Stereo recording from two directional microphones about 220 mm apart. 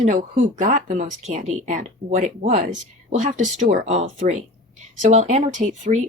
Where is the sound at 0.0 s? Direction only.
40° right (ahead or behind).